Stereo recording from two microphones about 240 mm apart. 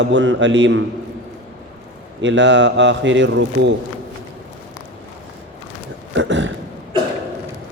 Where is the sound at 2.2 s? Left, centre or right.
Right.